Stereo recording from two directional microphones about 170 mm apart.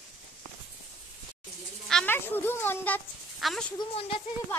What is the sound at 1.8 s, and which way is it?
A child's voice, 5° left (ahead or behind).